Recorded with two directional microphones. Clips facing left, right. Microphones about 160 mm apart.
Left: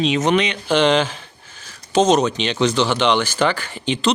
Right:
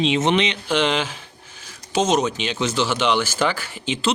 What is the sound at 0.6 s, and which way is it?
Speech, centre (ahead or behind).